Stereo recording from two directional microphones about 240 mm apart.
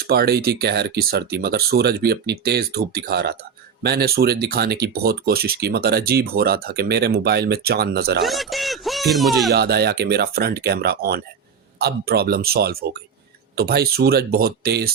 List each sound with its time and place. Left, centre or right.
0.1 s speech: right
8.2 s speech: centre
9.5 s speech: right